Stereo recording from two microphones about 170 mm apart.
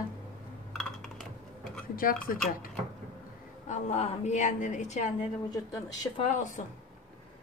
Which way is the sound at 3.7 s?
40° left (ahead or behind).